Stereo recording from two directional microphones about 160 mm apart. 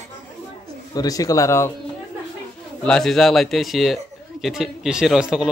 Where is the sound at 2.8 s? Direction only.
5° left (ahead or behind).